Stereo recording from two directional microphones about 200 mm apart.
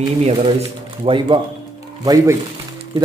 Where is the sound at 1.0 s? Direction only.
25° right (ahead or behind).